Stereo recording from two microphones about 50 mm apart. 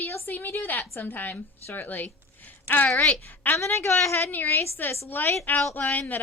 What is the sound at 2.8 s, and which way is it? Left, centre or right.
Speech, left.